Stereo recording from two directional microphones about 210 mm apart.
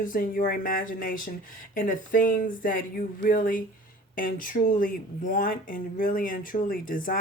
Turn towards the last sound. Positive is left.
turn(degrees=40)  # may be behind; listen again after turning